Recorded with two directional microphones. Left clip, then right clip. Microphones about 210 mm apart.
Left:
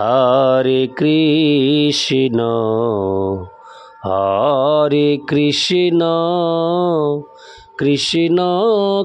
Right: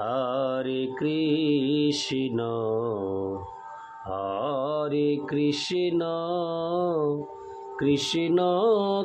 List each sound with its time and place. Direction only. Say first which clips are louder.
0.0 s mantra: left 14 dB; 50° left (ahead or behind)